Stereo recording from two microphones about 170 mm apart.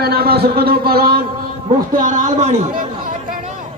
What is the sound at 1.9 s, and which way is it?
Speech, 50° right (ahead or behind).